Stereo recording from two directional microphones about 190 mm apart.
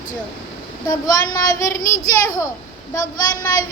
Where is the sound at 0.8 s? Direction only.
20° left (ahead or behind).